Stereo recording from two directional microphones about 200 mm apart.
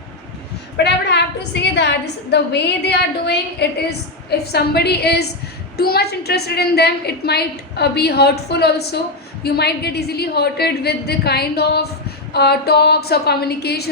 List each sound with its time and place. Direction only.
0.8 s a woman's voice: 60° left (ahead or behind)